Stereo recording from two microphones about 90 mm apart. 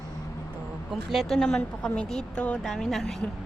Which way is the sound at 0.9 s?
Centre (ahead or behind).